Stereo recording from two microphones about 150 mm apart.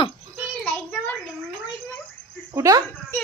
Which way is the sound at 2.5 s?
20° right (ahead or behind).